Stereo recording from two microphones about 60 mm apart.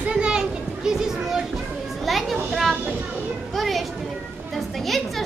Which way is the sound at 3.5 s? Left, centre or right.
Centre.